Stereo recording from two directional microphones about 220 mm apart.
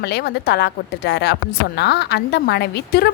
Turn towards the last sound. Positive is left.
turn(degrees=50)  # may be behind; listen again after turning